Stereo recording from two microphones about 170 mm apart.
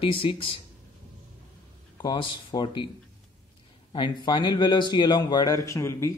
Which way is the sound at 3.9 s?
30° left (ahead or behind).